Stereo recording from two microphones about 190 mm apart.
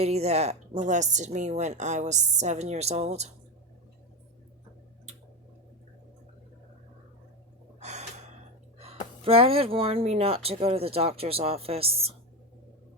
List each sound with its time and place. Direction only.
0.0 s speech: 35° right (ahead or behind)
7.8 s gasp: 35° right (ahead or behind)
8.8 s speech: 30° right (ahead or behind)